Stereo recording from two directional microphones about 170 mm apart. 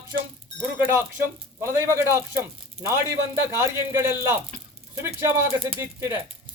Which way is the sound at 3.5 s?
15° right (ahead or behind).